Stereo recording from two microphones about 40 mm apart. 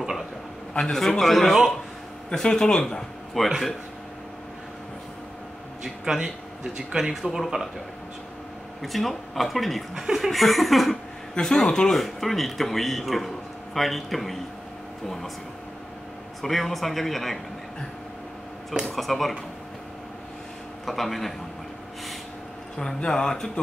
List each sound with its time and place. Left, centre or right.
0.7 s speech: centre
1.2 s speech: centre
2.3 s speech: centre
6.0 s speech: centre
8.8 s speech: centre
11.3 s speech: centre
16.3 s speech: centre
18.9 s speech: centre
20.8 s speech: centre
22.8 s speech: left